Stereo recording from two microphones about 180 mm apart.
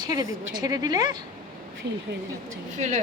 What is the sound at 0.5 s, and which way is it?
Speech, 20° right (ahead or behind).